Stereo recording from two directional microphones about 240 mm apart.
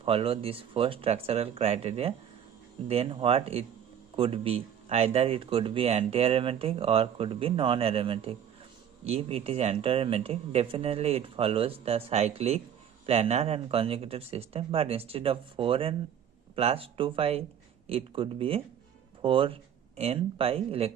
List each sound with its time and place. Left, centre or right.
0.0 s speech: right